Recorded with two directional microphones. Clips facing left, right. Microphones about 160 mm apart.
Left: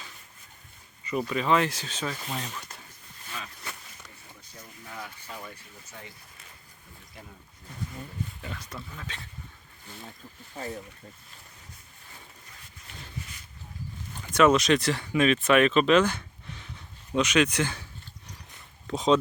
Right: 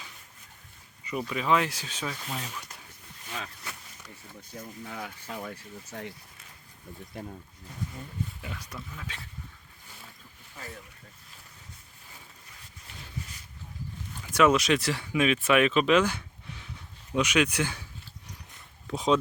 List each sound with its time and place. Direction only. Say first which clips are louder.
1.2 s speech: left 1 dB; 5° right (ahead or behind)
4.5 s speech: right 4 dB; 60° right (ahead or behind)
8.4 s speech: left 1 dB; 10° right (ahead or behind)
10.5 s speech: left 8 dB; 30° left (ahead or behind)
14.2 s speech: left 2 dB; 10° right (ahead or behind)
18.9 s speech: left 2 dB; 10° right (ahead or behind)